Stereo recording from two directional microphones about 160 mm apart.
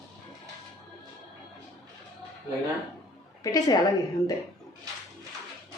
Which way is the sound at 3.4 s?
25° left (ahead or behind).